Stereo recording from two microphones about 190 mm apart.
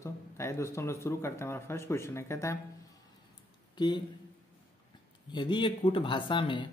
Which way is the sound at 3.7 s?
25° left (ahead or behind).